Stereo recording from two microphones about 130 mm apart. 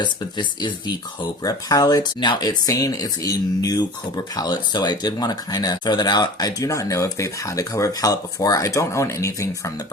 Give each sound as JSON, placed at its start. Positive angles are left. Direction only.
{"t": 0.0, "sound": "speech", "side_deg": 35}